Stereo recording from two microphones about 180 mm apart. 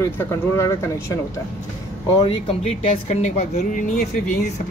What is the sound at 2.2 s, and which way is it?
Speech, 30° left (ahead or behind).